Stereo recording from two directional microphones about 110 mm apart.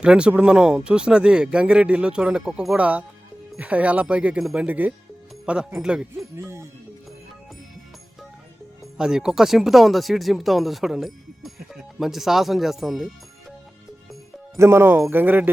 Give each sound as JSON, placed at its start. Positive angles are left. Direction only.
{"t": 0.0, "sound": "speech", "side_deg": -10}
{"t": 6.4, "sound": "speech", "side_deg": -25}
{"t": 9.0, "sound": "speech", "side_deg": -5}
{"t": 14.5, "sound": "speech", "side_deg": -25}